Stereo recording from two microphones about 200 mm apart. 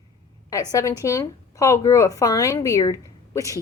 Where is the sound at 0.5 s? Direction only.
15° left (ahead or behind).